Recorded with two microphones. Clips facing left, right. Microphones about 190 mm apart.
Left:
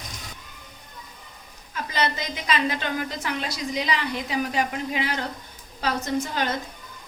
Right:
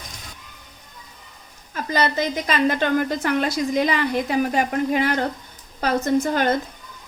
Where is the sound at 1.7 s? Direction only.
45° right (ahead or behind).